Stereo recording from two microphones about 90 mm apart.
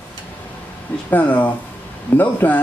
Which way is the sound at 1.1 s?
20° left (ahead or behind).